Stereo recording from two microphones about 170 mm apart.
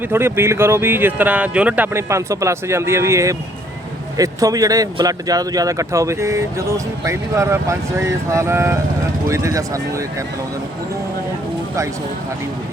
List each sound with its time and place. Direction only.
0.1 s speech: 15° right (ahead or behind)